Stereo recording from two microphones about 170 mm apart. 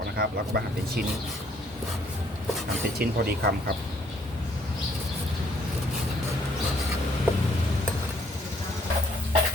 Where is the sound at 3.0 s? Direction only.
65° right (ahead or behind).